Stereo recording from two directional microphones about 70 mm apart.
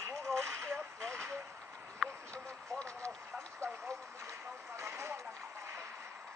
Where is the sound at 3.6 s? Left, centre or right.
Right.